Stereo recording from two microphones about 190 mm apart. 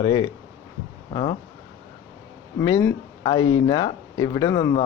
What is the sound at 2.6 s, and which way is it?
Speech, 15° left (ahead or behind).